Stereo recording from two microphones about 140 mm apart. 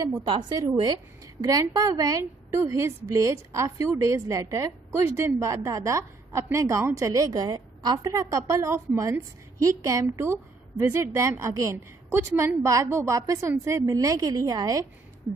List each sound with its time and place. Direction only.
0.3 s a woman's voice: 30° right (ahead or behind)